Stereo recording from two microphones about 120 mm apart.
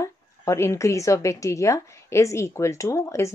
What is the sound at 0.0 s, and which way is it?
A woman's voice, 25° left (ahead or behind).